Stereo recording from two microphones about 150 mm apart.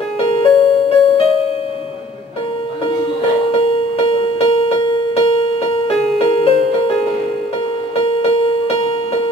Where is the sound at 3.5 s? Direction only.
40° left (ahead or behind).